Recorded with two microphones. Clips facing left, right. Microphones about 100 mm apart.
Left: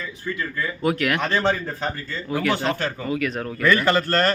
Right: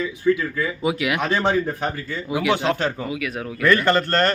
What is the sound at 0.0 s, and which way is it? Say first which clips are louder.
Speech: right 9 dB; 10° right (ahead or behind).